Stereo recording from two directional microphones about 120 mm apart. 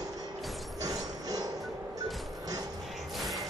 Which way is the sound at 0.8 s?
30° right (ahead or behind).